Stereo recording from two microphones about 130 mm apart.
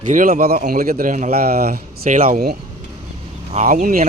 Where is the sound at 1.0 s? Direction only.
65° right (ahead or behind).